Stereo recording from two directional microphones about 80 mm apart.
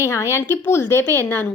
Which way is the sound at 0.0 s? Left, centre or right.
Left.